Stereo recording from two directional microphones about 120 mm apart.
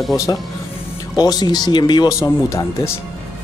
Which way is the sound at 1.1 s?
35° left (ahead or behind).